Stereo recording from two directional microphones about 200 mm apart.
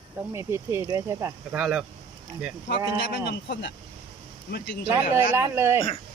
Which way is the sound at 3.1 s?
60° left (ahead or behind).